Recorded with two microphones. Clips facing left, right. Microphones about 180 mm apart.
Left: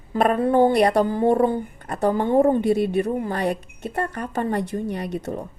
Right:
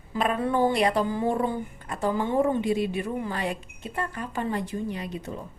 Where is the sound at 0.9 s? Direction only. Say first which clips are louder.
Left 6 dB; 65° left (ahead or behind).